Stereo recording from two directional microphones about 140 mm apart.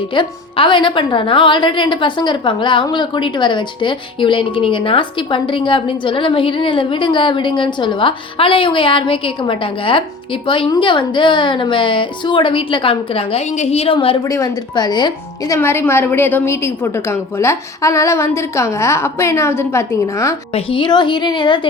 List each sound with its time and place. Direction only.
0.1 s a woman's voice: 35° left (ahead or behind)
14.3 s a woman's voice: 25° left (ahead or behind)
15.5 s a woman's voice: 20° left (ahead or behind)
20.5 s a woman's voice: 40° left (ahead or behind)